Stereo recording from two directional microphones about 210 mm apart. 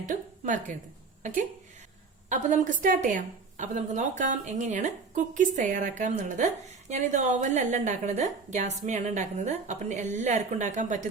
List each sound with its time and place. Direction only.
0.0 s a woman's voice: 35° right (ahead or behind)
2.3 s a woman's voice: 35° right (ahead or behind)